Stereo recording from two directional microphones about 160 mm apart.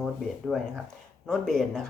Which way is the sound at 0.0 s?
Centre (ahead or behind).